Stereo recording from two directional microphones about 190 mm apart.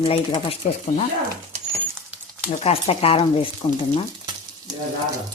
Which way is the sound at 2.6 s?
30° left (ahead or behind).